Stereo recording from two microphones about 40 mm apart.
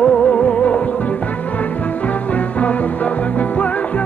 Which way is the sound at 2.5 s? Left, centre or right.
Left.